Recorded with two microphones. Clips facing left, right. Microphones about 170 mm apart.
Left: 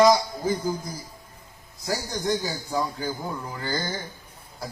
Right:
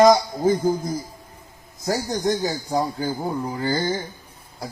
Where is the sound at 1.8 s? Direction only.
45° right (ahead or behind).